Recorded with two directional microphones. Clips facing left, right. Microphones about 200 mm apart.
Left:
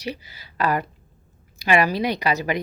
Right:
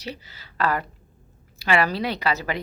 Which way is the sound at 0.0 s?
10° left (ahead or behind).